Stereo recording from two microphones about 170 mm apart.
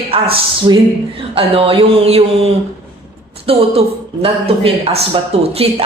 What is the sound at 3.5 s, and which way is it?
Speech, 35° right (ahead or behind).